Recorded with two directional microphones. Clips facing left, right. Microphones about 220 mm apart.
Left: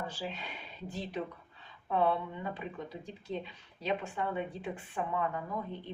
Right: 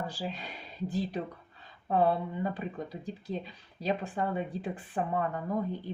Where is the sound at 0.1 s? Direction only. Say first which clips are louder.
Right 3 dB; 40° right (ahead or behind).